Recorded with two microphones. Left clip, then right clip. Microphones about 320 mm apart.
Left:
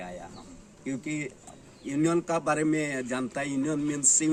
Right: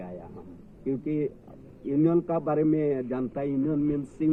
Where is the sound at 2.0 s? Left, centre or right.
Centre.